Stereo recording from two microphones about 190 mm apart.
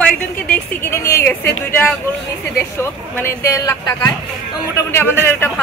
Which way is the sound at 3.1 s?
15° left (ahead or behind).